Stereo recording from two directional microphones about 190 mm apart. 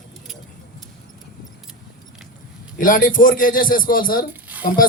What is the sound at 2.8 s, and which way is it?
A woman's voice, 45° left (ahead or behind).